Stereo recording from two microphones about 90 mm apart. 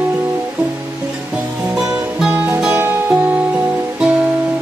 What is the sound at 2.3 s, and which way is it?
Music, 20° right (ahead or behind).